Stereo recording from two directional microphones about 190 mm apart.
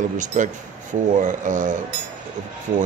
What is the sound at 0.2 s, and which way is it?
Speech, 40° right (ahead or behind).